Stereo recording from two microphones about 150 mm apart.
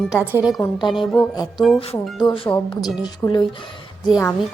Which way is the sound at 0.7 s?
30° left (ahead or behind).